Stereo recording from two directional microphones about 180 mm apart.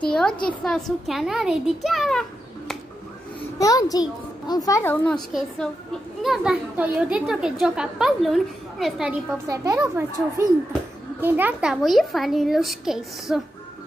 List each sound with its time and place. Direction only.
0.0 s a child's voice: 5° left (ahead or behind)
3.5 s a child's voice: 20° left (ahead or behind)
5.0 s a child's voice: 5° left (ahead or behind)
9.5 s a child's voice: 15° right (ahead or behind); by 13.4 s centre (ahead or behind)